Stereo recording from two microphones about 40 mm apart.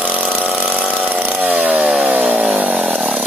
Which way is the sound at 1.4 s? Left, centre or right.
Right.